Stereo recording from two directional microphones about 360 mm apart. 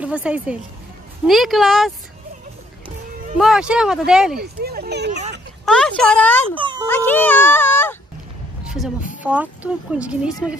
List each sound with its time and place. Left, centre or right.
0.0 s speech: centre
3.3 s speech: centre
4.4 s speech: right
5.7 s speech: centre
6.5 s speech: centre
7.1 s speech: centre
8.6 s a sound: centre
9.2 s speech: centre